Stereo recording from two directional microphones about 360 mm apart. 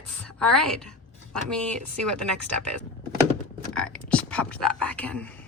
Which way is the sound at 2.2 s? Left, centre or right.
Right.